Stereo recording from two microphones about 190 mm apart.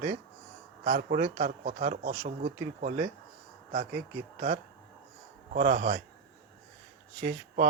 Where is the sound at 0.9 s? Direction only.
45° right (ahead or behind).